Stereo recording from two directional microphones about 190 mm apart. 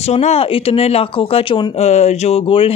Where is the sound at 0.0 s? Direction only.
35° left (ahead or behind).